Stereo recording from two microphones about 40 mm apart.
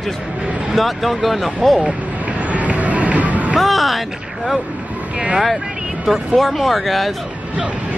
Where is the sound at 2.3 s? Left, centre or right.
Right.